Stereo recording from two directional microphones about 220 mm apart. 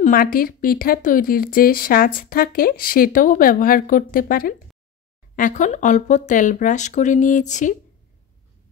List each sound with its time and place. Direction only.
0.0 s speech: 40° left (ahead or behind)